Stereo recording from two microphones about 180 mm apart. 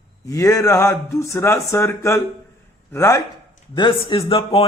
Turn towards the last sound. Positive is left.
turn(degrees=30)  # may be behind; listen again after turning